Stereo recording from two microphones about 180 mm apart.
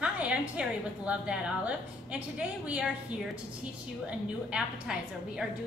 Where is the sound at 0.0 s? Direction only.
5° right (ahead or behind).